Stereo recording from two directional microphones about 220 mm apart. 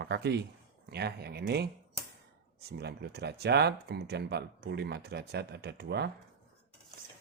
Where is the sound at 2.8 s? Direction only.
50° right (ahead or behind).